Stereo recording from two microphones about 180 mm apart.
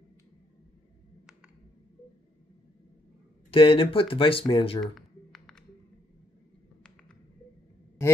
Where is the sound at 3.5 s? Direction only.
30° left (ahead or behind).